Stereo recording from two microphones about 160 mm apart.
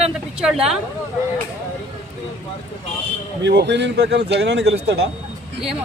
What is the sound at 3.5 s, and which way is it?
Speech, 90° right.